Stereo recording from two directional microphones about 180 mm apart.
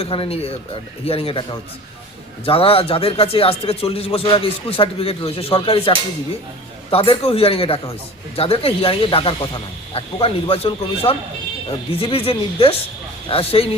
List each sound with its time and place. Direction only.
0.0 s speech: 30° left (ahead or behind)